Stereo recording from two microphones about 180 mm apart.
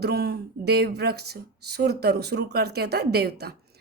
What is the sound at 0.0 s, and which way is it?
A woman's voice, 65° right (ahead or behind).